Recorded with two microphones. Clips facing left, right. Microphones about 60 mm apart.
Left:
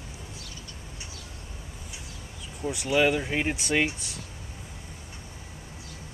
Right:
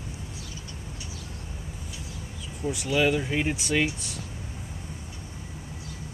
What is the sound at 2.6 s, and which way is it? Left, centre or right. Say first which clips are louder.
Speech: right 1 dB; centre.